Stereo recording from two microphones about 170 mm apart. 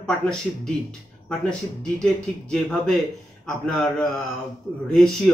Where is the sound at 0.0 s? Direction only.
5° left (ahead or behind).